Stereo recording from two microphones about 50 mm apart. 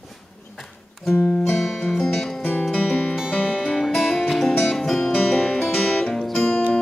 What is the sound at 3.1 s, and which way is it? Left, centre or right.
Music, centre.